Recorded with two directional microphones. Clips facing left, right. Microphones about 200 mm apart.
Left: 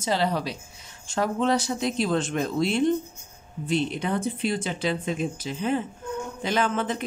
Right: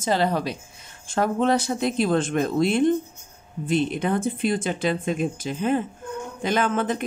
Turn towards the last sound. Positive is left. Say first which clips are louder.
# right 2 dB
turn(degrees=-50)  # may be behind; listen again after turning